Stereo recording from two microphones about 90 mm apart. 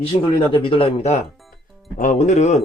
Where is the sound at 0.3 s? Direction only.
70° left (ahead or behind).